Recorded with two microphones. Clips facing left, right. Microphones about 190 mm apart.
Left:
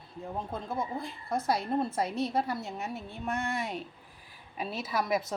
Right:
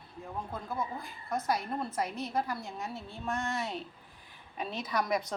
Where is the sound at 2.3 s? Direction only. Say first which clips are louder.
Left 3 dB; 25° left (ahead or behind).